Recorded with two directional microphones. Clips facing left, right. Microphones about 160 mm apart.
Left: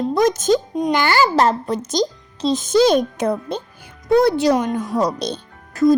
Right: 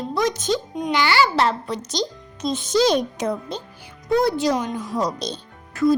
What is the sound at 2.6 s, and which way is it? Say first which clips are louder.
Speech: left 4 dB; 55° left (ahead or behind).